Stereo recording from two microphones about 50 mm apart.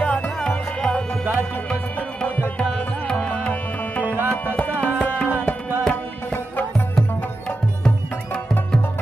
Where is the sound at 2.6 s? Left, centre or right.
Left.